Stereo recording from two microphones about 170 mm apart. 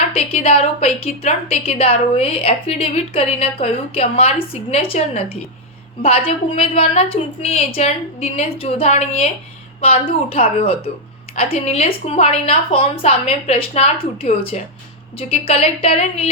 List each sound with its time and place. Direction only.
0.1 s a woman's voice: 35° left (ahead or behind)